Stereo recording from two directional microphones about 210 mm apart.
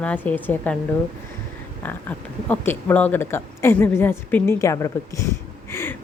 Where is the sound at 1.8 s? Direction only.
10° left (ahead or behind).